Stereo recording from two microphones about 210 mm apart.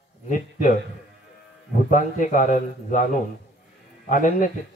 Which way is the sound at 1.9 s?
40° left (ahead or behind).